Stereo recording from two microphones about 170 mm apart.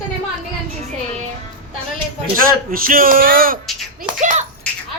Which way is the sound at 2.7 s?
55° right (ahead or behind).